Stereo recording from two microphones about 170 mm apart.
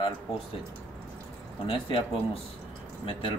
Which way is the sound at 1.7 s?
30° left (ahead or behind).